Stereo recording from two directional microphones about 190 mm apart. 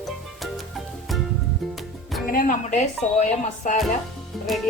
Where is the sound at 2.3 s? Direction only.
45° left (ahead or behind).